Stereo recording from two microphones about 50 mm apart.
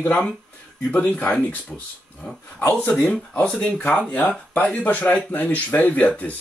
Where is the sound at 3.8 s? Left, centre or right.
Left.